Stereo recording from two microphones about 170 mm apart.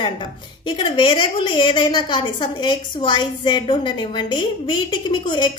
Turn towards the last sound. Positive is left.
turn(degrees=30)  # may be behind; listen again after turning